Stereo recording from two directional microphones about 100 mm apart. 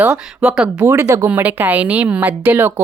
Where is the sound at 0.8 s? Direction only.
30° right (ahead or behind).